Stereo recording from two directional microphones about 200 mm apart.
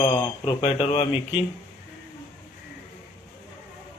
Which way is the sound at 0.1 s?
30° left (ahead or behind).